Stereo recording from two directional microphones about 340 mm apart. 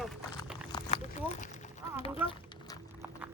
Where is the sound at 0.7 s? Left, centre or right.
Centre.